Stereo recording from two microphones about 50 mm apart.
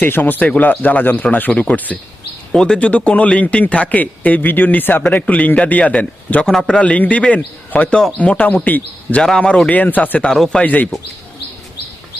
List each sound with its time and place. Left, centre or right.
0.0 s a man's voice: left
2.5 s speech: centre
2.7 s a man's voice: left
5.2 s a man's voice: left
10.2 s speech: centre
10.6 s a man's voice: left